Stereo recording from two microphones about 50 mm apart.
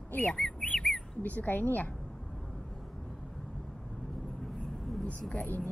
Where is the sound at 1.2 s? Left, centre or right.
Left.